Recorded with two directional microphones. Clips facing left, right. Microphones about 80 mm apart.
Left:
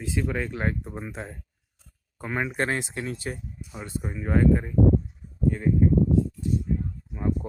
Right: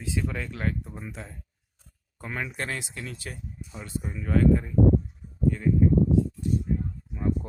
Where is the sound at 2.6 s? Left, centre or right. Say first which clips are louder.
Left 6 dB; left.